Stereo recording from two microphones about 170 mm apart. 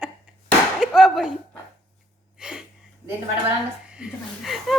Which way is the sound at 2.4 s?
5° right (ahead or behind).